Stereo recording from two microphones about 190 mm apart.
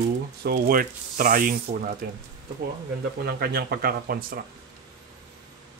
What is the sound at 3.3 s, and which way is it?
Speech, 55° right (ahead or behind).